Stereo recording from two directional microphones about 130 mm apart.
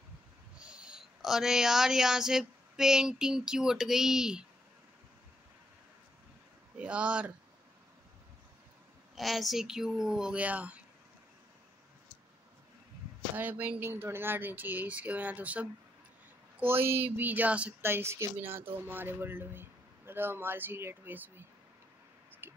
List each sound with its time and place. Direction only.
0.6 s speech: 5° right (ahead or behind)
6.8 s speech: 10° right (ahead or behind)
9.1 s speech: centre (ahead or behind)
13.4 s speech: 15° right (ahead or behind)
22.4 s a sound: 20° right (ahead or behind)